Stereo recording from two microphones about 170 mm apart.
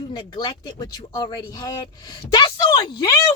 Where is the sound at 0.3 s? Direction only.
25° left (ahead or behind).